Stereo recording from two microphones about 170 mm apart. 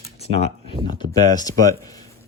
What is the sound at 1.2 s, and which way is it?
Speech, 25° left (ahead or behind).